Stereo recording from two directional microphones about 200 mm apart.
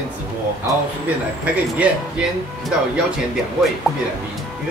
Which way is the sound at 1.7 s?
5° right (ahead or behind).